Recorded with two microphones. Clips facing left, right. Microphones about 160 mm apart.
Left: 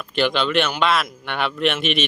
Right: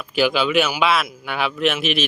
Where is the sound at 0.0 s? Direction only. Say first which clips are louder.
Right 2 dB; 5° right (ahead or behind).